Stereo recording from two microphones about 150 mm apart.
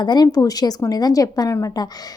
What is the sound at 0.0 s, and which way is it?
A woman's voice, 30° left (ahead or behind).